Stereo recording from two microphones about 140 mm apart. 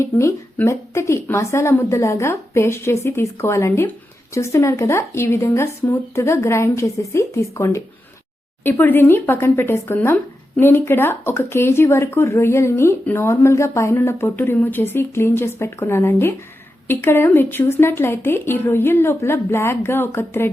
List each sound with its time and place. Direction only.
0.0 s a woman's voice: 20° left (ahead or behind)